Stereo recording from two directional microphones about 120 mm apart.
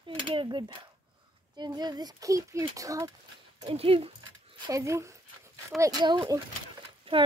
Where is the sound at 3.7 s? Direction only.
55° right (ahead or behind).